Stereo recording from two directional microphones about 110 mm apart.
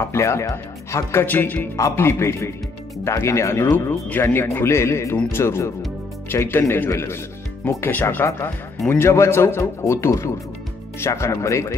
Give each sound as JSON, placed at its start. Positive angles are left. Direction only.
{"t": 0.0, "sound": "speech", "side_deg": 25}